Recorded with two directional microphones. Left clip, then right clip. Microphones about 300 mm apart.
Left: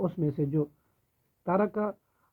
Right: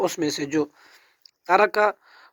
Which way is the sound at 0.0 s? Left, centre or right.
Centre.